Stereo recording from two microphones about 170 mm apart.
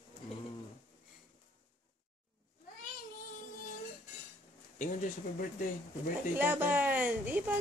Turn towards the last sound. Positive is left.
turn(degrees=-10)  # may be behind; listen again after turning